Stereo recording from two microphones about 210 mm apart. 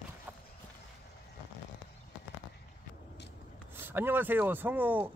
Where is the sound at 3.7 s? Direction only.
10° right (ahead or behind).